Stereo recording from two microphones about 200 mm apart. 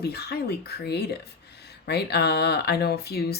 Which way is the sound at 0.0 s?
55° left (ahead or behind).